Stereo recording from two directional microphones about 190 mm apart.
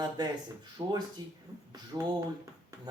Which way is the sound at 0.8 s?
20° right (ahead or behind).